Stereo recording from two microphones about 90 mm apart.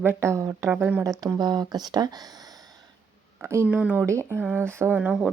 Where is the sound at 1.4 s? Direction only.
50° right (ahead or behind).